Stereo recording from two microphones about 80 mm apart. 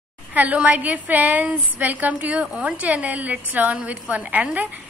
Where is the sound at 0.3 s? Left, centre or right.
Centre.